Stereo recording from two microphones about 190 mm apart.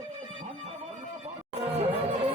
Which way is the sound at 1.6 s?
30° right (ahead or behind).